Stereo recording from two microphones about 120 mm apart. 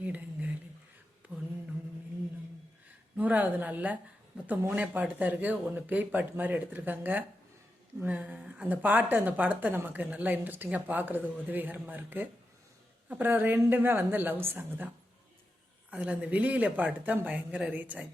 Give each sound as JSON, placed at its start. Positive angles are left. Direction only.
{"t": 0.0, "sound": "a sound", "side_deg": -15}
{"t": 3.2, "sound": "a woman's voice", "side_deg": -15}
{"t": 15.9, "sound": "a woman's voice", "side_deg": -10}